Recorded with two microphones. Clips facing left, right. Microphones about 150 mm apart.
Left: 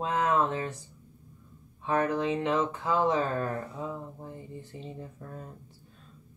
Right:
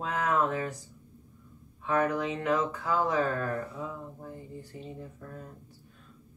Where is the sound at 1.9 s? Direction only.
30° left (ahead or behind).